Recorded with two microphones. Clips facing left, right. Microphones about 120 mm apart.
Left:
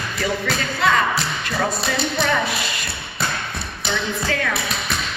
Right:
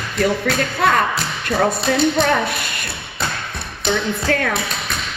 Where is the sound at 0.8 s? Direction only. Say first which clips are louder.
Even; 50° right (ahead or behind).